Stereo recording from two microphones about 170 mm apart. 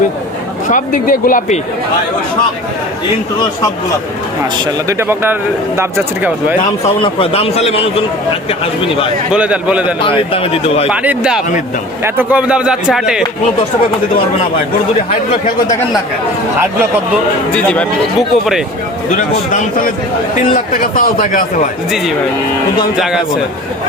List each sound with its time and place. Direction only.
0.7 s a man's voice: 50° left (ahead or behind)
4.5 s speech: 15° right (ahead or behind)
6.8 s speech: 35° left (ahead or behind)
9.3 s speech: 5° right (ahead or behind)
10.0 s speech: 30° left (ahead or behind)
10.8 s a man's voice: 10° right (ahead or behind)
17.5 s a man's voice: 5° left (ahead or behind)
20.5 s a man's voice: 55° left (ahead or behind)